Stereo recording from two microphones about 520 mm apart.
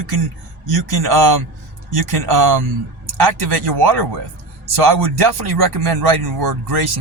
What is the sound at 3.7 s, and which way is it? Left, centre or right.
Speech, right.